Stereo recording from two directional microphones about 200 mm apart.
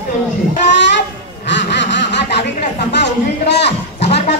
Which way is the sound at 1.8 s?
60° left (ahead or behind).